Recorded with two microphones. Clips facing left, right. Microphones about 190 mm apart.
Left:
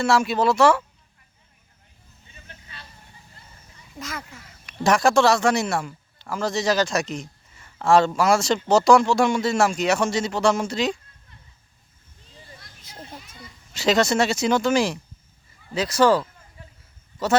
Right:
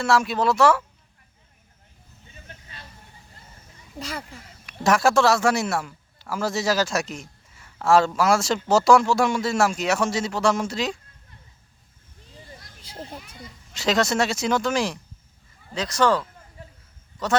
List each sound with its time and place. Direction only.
0.0 s a man's voice: centre (ahead or behind)
3.9 s speech: 30° right (ahead or behind)
4.6 s a man's voice: centre (ahead or behind)
12.8 s speech: 30° right (ahead or behind)
13.7 s a man's voice: centre (ahead or behind)